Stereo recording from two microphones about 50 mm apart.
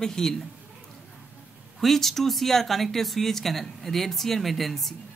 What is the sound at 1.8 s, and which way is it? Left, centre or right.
Speech, centre.